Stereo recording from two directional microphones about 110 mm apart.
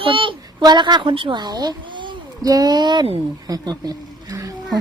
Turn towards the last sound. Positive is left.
turn(degrees=-35)  # may be behind; listen again after turning